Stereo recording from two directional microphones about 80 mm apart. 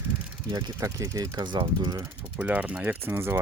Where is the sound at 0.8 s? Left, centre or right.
Right.